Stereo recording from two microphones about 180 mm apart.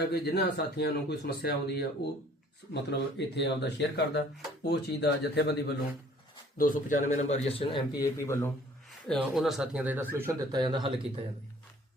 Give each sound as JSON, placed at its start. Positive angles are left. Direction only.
{"t": 0.0, "sound": "speech", "side_deg": 65}
{"t": 6.6, "sound": "a man's voice", "side_deg": 45}
{"t": 9.0, "sound": "speech", "side_deg": 0}
{"t": 10.5, "sound": "speech", "side_deg": -25}